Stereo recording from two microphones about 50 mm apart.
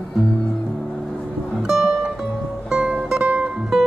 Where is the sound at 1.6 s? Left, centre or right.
Centre.